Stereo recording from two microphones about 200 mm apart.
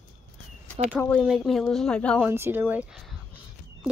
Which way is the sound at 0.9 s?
5° left (ahead or behind).